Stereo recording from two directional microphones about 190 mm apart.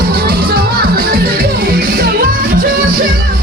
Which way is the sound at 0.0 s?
55° right (ahead or behind).